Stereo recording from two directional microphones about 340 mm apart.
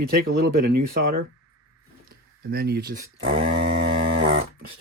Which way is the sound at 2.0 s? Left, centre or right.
Right.